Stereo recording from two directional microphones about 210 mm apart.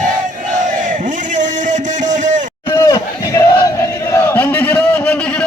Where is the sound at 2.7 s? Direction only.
15° left (ahead or behind).